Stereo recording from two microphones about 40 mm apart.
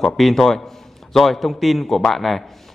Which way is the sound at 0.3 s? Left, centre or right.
Centre.